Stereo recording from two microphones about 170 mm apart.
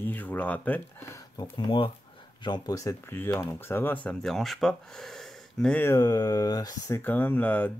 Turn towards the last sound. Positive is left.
turn(degrees=10)  # may be behind; listen again after turning